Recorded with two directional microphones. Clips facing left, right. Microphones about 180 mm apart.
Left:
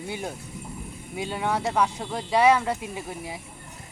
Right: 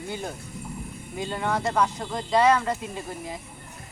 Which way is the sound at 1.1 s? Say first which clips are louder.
Even; 10° left (ahead or behind).